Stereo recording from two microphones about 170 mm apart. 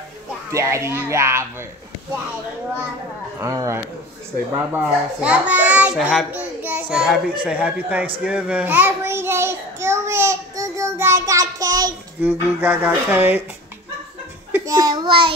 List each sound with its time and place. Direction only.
0.5 s speech: 15° right (ahead or behind)
3.3 s a child's voice: 20° right (ahead or behind)
8.2 s child singing: 5° right (ahead or behind)
12.2 s speech: 10° right (ahead or behind)
14.5 s child singing: 20° right (ahead or behind)